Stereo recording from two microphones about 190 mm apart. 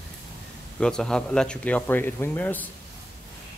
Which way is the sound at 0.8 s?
5° left (ahead or behind).